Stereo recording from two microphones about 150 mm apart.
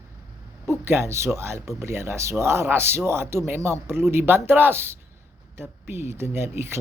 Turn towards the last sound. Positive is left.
turn(degrees=-15)  # may be behind; listen again after turning